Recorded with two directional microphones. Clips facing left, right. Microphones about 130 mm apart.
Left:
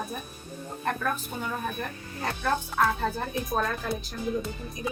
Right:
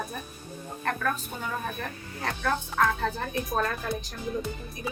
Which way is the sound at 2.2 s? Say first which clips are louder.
Left 1 dB; 10° left (ahead or behind).